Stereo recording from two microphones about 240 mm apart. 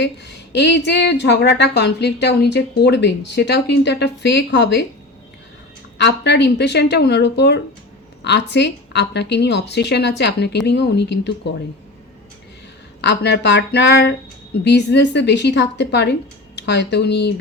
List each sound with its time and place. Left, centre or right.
0.0 s a woman's voice: left
6.0 s a woman's voice: left
13.0 s a woman's voice: left